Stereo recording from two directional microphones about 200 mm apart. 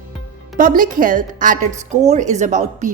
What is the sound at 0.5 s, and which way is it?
A woman's voice, 40° right (ahead or behind).